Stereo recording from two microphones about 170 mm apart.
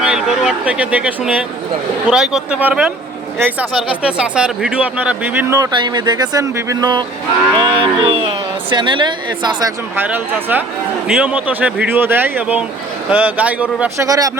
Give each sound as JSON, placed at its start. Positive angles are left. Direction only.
{"t": 0.0, "sound": "speech", "side_deg": -5}
{"t": 5.7, "sound": "speech", "side_deg": -25}
{"t": 7.6, "sound": "cattle", "side_deg": -30}
{"t": 8.7, "sound": "speech", "side_deg": -30}
{"t": 9.9, "sound": "speech", "side_deg": -10}
{"t": 14.0, "sound": "speech", "side_deg": -20}